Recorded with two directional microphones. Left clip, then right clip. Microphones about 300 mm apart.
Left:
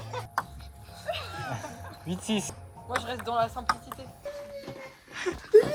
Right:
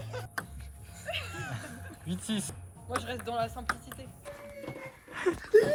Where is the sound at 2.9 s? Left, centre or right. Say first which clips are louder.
Left 4 dB; left.